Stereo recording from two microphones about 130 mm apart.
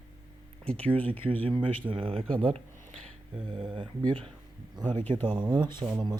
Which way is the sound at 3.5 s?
40° right (ahead or behind).